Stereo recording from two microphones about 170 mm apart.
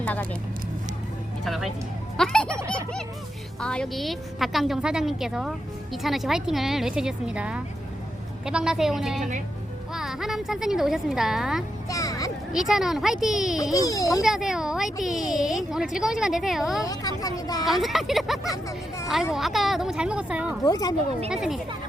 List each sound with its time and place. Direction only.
0.0 s speech: 10° left (ahead or behind)
1.5 s a woman's voice: centre (ahead or behind)
3.6 s a woman's voice: 5° left (ahead or behind)
11.9 s music: 20° left (ahead or behind)
12.5 s a woman's voice: centre (ahead or behind)
13.7 s speech: 20° left (ahead or behind)
14.2 s a woman's voice: centre (ahead or behind)
16.8 s speech: 20° left (ahead or behind)
17.7 s a woman's voice: centre (ahead or behind)
20.7 s speech: 20° left (ahead or behind)
21.2 s a woman's voice: 5° right (ahead or behind)